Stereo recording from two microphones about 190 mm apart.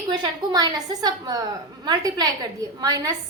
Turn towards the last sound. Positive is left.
turn(degrees=-20)  # may be behind; listen again after turning